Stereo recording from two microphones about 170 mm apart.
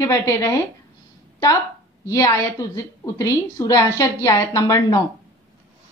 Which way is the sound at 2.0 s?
20° left (ahead or behind).